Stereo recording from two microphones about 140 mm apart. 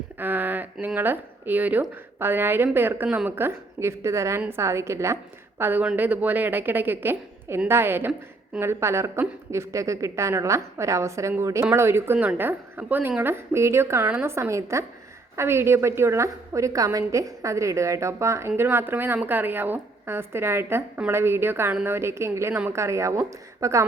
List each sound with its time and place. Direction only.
0.2 s a woman's voice: 15° right (ahead or behind)